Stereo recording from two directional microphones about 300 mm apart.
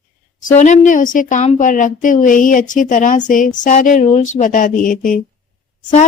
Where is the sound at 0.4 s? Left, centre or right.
Left.